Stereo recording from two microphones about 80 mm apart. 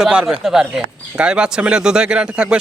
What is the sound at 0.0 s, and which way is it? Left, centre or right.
Speech, centre.